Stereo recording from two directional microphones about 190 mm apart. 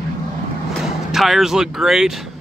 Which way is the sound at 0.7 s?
Centre (ahead or behind).